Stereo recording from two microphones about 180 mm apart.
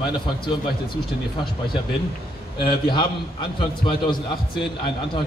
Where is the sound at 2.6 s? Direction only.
25° left (ahead or behind).